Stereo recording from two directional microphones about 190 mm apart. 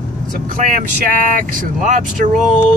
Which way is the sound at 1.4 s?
45° right (ahead or behind).